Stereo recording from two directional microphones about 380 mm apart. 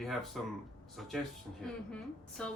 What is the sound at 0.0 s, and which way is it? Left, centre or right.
Speech, centre.